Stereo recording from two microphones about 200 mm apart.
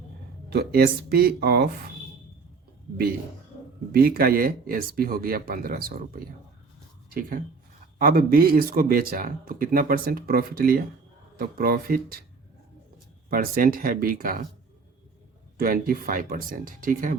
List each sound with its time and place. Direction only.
0.5 s speech: 50° right (ahead or behind)
3.9 s speech: 45° right (ahead or behind)
13.3 s speech: 45° right (ahead or behind)
15.5 s speech: 45° right (ahead or behind)